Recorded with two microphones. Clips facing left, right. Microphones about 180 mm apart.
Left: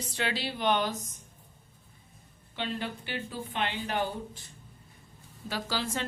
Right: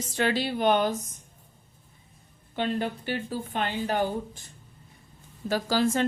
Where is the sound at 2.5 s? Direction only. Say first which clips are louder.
Right 6 dB; 45° right (ahead or behind).